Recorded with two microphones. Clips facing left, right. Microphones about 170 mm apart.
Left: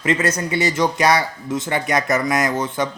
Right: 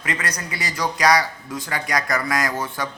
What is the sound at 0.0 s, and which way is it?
Speech, 25° left (ahead or behind).